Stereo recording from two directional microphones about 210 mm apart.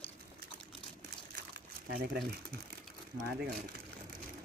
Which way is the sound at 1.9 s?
45° right (ahead or behind).